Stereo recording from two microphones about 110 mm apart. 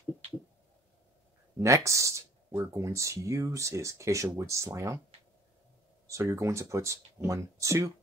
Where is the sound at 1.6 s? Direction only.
30° right (ahead or behind).